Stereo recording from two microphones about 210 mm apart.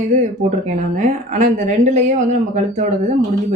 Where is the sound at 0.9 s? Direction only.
35° right (ahead or behind).